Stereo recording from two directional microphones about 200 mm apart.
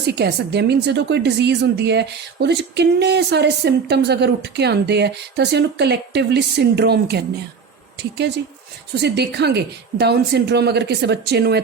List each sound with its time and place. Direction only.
0.0 s a woman's voice: 55° right (ahead or behind)